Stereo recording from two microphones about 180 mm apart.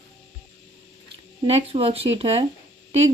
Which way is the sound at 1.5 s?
35° right (ahead or behind).